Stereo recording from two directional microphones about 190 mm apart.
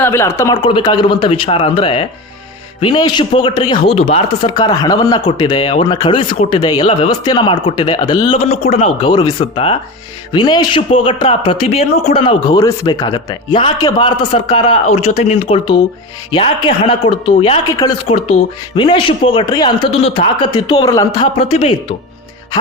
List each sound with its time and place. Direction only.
0.0 s speech: 15° left (ahead or behind)
17.8 s speech: 15° left (ahead or behind)